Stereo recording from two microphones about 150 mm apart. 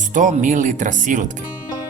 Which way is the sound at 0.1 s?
60° right (ahead or behind).